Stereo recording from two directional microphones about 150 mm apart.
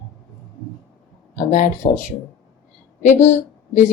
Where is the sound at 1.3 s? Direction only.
55° left (ahead or behind).